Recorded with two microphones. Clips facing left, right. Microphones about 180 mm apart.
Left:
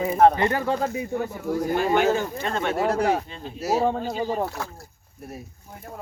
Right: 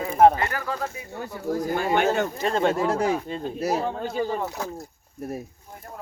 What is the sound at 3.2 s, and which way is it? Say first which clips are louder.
Speech: right 1 dB; 45° right (ahead or behind).